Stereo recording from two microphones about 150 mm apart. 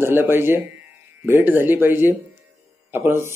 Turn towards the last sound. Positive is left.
turn(degrees=-15)  # may be behind; listen again after turning